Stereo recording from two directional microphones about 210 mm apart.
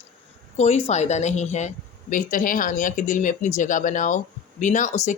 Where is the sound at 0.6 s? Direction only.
30° left (ahead or behind).